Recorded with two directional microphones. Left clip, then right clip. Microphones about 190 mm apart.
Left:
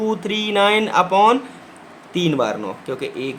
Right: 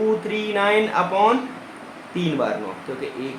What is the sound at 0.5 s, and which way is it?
Speech, 40° left (ahead or behind).